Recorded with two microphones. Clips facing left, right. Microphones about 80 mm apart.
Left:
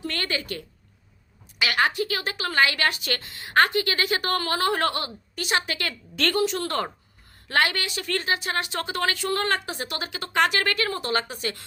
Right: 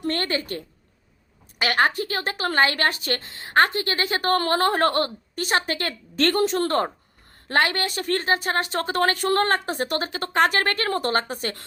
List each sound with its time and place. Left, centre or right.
0.0 s a woman's voice: right